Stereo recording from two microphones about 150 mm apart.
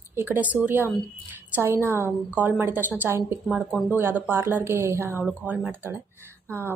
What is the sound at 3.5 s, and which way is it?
Speech, centre (ahead or behind).